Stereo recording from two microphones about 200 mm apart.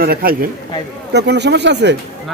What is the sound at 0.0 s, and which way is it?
Speech, 50° right (ahead or behind).